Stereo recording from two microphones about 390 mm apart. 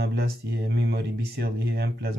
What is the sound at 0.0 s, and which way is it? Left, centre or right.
Speech, right.